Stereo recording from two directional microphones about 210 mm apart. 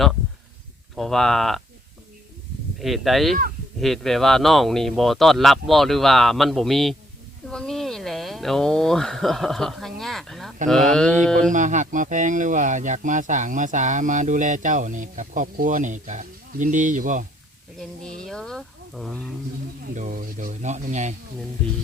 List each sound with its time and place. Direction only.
0.9 s speech: centre (ahead or behind)
2.7 s speech: centre (ahead or behind)
11.5 s speech: 35° right (ahead or behind)
17.7 s speech: 5° left (ahead or behind)
19.9 s speech: 35° right (ahead or behind)